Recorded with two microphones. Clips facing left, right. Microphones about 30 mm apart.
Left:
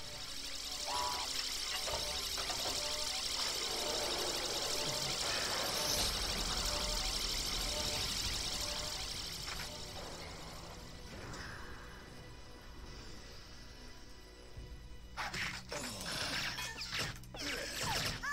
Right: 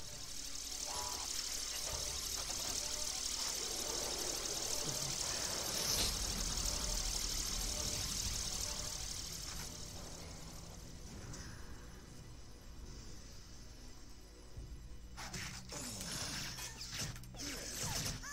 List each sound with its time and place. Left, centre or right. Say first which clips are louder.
0.1 s vehicle: left 4 dB; left
15.1 s music: left 8 dB; left